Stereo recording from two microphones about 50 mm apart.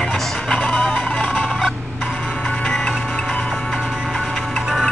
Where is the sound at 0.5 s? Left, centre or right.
Left.